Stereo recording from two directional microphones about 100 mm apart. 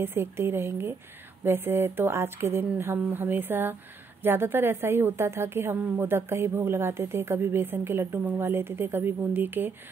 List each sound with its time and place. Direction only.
0.0 s a woman's voice: 25° right (ahead or behind)